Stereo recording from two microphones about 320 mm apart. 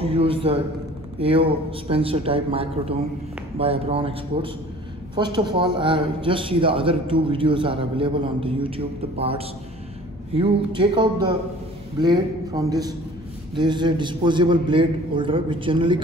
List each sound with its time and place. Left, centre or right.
0.0 s a man's voice: centre